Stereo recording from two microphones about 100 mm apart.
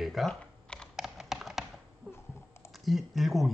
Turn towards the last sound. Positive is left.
turn(degrees=0)  # may be behind; listen again after turning